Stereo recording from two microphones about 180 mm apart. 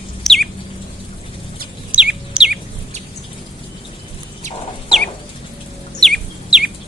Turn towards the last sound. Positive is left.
turn(degrees=-5)  # may be behind; listen again after turning